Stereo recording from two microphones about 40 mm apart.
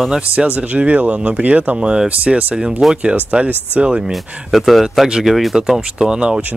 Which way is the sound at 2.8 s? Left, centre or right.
Centre.